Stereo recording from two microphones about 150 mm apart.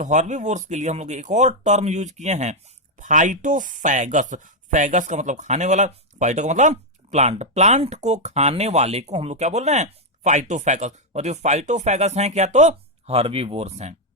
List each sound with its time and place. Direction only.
0.0 s speech: 55° right (ahead or behind)